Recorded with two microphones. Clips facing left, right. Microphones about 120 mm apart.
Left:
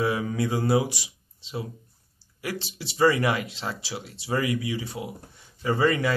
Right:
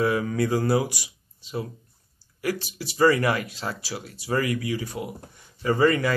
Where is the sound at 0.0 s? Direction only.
25° left (ahead or behind).